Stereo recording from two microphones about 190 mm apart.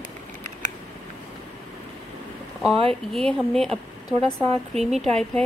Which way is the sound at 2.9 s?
Centre (ahead or behind).